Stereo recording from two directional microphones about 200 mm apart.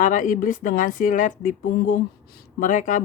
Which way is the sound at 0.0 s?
40° left (ahead or behind).